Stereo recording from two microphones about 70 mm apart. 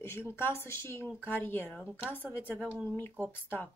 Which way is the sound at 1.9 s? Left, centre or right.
Centre.